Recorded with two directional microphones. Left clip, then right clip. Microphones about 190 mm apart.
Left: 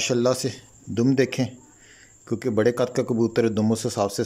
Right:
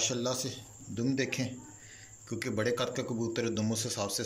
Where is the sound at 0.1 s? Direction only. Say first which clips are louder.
Left 12 dB; 60° left (ahead or behind).